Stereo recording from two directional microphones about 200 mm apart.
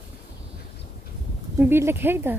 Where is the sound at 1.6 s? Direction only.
10° right (ahead or behind).